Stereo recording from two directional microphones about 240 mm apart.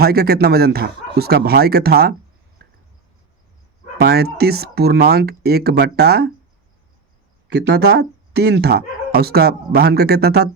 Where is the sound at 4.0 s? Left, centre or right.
Right.